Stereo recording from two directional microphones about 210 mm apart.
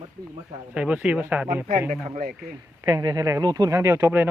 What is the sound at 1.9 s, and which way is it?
Speech, 40° right (ahead or behind).